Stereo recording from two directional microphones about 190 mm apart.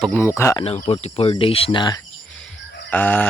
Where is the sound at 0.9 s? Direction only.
30° left (ahead or behind).